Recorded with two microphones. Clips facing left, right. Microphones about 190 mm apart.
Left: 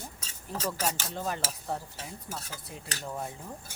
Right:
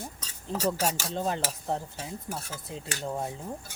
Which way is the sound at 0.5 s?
20° right (ahead or behind).